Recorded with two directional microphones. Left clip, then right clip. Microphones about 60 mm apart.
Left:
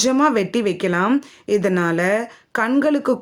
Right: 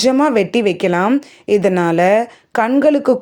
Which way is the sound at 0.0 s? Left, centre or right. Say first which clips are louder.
Right 4 dB; right.